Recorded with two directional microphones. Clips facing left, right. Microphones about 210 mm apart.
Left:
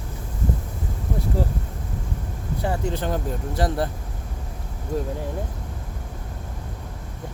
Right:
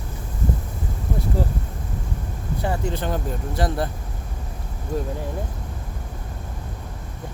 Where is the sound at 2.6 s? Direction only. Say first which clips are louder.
Even; 35° left (ahead or behind).